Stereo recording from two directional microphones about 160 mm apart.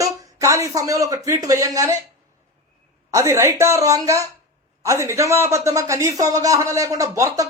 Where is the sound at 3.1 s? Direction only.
20° right (ahead or behind).